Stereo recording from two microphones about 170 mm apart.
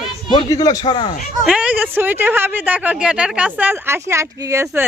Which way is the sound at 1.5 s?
10° right (ahead or behind).